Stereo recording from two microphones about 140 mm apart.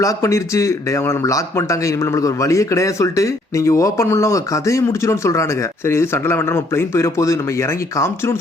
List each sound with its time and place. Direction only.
0.0 s speech: 20° left (ahead or behind)